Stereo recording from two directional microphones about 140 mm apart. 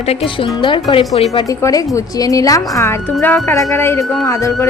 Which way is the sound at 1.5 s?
25° left (ahead or behind).